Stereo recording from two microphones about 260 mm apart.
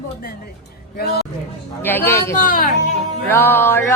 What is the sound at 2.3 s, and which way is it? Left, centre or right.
Speech, left.